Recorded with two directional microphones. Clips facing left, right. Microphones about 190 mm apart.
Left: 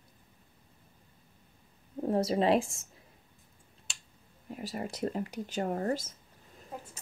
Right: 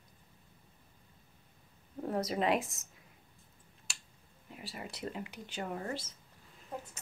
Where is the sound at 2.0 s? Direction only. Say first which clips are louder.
Left 5 dB; 30° left (ahead or behind).